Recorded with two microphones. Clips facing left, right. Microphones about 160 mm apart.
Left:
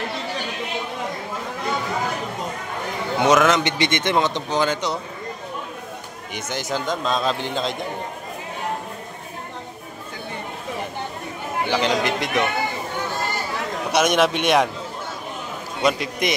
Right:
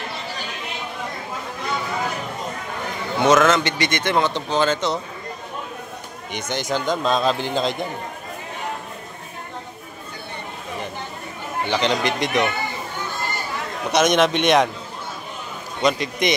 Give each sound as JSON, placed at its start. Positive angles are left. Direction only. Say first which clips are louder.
{"t": 3.3, "sound": "a man's voice", "louder": "right 1 dB", "side_deg": 15}
{"t": 6.3, "sound": "a man's voice", "louder": "right 2 dB", "side_deg": 5}
{"t": 11.7, "sound": "a man's voice", "louder": "even", "side_deg": 5}
{"t": 13.9, "sound": "a man's voice", "louder": "right 1 dB", "side_deg": 10}
{"t": 15.8, "sound": "a man's voice", "louder": "right 1 dB", "side_deg": 5}